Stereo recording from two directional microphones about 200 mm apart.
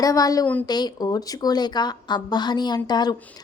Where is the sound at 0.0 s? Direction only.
15° left (ahead or behind).